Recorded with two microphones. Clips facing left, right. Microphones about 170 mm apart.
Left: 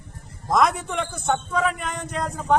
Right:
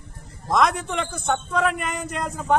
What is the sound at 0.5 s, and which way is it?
A man's voice, centre (ahead or behind).